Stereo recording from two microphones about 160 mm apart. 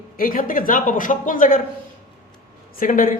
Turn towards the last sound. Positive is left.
turn(degrees=55)  # may be behind; listen again after turning